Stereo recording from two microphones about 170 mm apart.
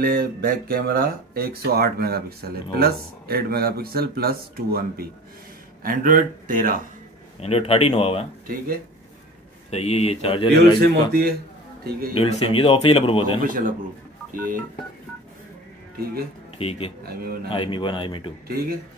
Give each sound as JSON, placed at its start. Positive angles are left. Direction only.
{"t": 0.0, "sound": "speech", "side_deg": -60}
{"t": 7.3, "sound": "a man's voice", "side_deg": 35}
{"t": 9.7, "sound": "a man's voice", "side_deg": 40}
{"t": 10.8, "sound": "speech", "side_deg": -65}
{"t": 12.1, "sound": "a man's voice", "side_deg": 35}
{"t": 13.4, "sound": "speech", "side_deg": -55}
{"t": 16.5, "sound": "a man's voice", "side_deg": 35}
{"t": 17.0, "sound": "speech", "side_deg": -65}
{"t": 17.5, "sound": "speech", "side_deg": 30}
{"t": 18.5, "sound": "speech", "side_deg": -60}